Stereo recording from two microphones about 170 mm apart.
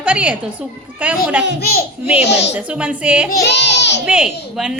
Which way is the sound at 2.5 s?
10° right (ahead or behind).